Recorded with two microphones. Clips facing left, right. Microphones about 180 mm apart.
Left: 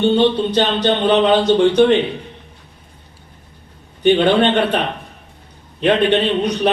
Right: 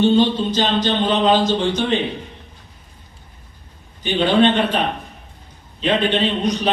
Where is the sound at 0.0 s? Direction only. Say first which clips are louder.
Left 1 dB; 65° left (ahead or behind).